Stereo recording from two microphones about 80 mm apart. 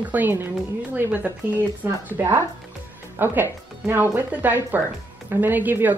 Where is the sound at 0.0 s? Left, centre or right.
Right.